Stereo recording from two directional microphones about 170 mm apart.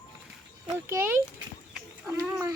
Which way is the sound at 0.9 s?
15° right (ahead or behind).